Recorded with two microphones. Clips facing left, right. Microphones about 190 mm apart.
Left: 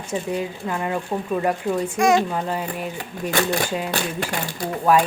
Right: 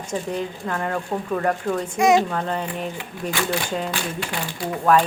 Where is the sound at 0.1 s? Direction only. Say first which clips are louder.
Left 1 dB; 10° left (ahead or behind).